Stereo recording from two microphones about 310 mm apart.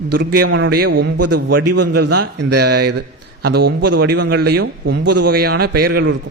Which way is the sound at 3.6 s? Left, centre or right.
Right.